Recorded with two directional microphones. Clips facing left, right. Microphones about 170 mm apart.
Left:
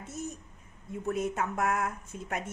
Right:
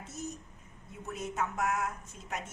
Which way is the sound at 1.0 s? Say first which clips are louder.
Left 5 dB; 55° left (ahead or behind).